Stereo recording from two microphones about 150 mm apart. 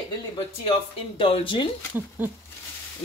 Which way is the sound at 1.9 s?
10° right (ahead or behind).